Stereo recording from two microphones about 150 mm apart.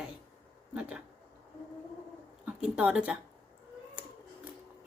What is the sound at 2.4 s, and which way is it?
Speech, 5° right (ahead or behind).